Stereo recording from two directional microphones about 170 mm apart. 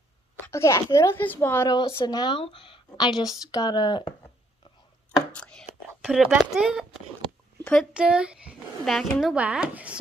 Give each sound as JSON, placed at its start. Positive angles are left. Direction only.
{"t": 0.5, "sound": "speech", "side_deg": 15}
{"t": 1.7, "sound": "a woman's voice", "side_deg": 30}
{"t": 5.1, "sound": "chopping", "side_deg": 5}
{"t": 6.0, "sound": "speech", "side_deg": 0}
{"t": 7.9, "sound": "speech", "side_deg": -5}